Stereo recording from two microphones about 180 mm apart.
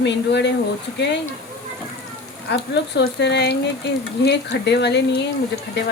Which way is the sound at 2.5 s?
70° left (ahead or behind).